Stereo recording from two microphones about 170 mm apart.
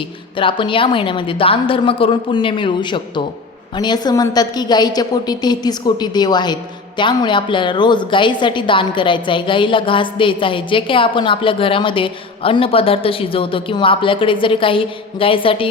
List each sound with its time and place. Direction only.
0.3 s a woman's voice: 30° left (ahead or behind)